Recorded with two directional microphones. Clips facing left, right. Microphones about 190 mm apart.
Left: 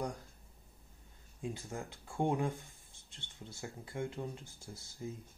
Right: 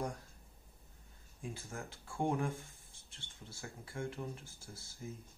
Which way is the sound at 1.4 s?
20° left (ahead or behind).